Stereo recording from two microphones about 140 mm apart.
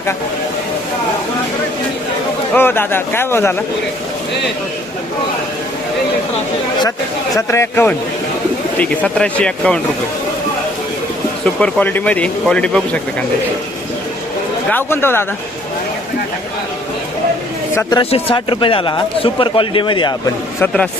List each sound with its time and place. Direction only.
2.6 s speech: 15° left (ahead or behind)
7.3 s speech: 20° left (ahead or behind)
11.6 s speech: 10° left (ahead or behind)
14.7 s speech: 15° left (ahead or behind)
17.9 s speech: 40° left (ahead or behind)
20.6 s speech: 10° left (ahead or behind)